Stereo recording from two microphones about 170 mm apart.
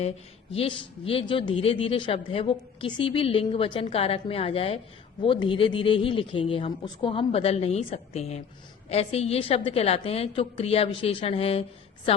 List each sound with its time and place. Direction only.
0.5 s a man's voice: 30° left (ahead or behind)